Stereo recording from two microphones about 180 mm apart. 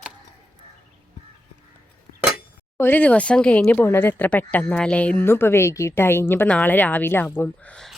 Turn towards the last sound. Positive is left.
turn(degrees=5)  # may be behind; listen again after turning